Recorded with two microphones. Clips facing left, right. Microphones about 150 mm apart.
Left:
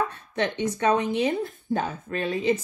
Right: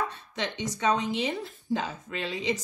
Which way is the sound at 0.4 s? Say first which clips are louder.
Left 6 dB; 55° left (ahead or behind).